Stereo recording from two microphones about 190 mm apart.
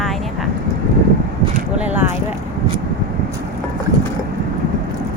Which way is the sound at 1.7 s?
10° right (ahead or behind).